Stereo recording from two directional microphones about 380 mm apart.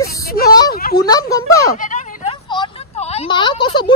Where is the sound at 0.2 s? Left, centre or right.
Left.